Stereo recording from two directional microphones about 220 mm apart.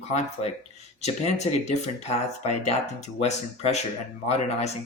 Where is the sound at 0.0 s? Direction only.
30° left (ahead or behind).